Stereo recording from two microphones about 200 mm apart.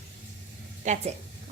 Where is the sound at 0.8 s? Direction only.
35° right (ahead or behind).